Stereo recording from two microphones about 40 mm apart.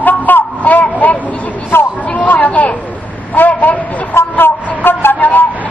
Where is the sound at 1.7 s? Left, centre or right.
Left.